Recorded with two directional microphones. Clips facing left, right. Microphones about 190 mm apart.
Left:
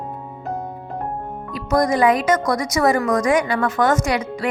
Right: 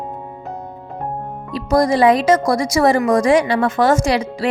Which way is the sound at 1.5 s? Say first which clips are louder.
Right 3 dB; 30° right (ahead or behind).